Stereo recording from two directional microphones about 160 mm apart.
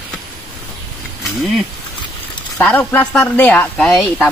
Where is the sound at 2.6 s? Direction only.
10° left (ahead or behind).